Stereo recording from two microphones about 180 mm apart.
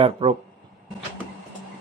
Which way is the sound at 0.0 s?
30° right (ahead or behind).